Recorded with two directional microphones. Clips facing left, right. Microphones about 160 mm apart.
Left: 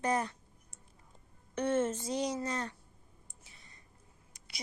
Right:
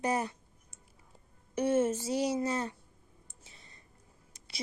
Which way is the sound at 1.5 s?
10° right (ahead or behind).